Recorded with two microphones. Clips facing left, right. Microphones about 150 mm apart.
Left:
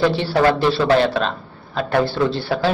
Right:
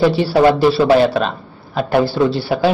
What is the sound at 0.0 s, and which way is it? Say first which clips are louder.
Speech: right 4 dB; 5° right (ahead or behind).